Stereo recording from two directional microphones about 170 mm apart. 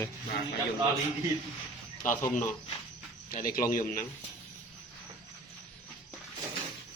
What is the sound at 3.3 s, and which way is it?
Speech, 55° left (ahead or behind).